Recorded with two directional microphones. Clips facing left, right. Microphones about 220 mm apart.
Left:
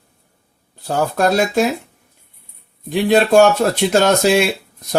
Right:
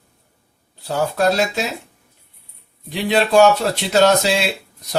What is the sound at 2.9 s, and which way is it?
Speech, 50° left (ahead or behind).